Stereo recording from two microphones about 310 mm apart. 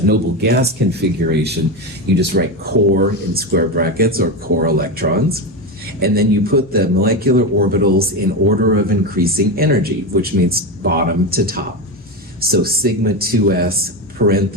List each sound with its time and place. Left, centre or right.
0.1 s a man's voice: right